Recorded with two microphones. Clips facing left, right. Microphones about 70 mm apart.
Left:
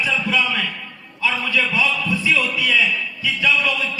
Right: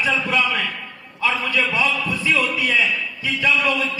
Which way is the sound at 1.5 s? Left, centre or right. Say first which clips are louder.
Left 2 dB; right.